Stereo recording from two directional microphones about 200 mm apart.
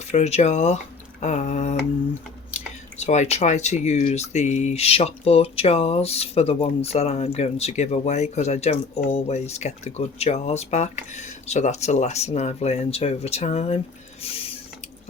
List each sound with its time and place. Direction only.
0.0 s speech: 30° left (ahead or behind)
3.0 s speech: 35° left (ahead or behind)
14.2 s a sound: 30° left (ahead or behind)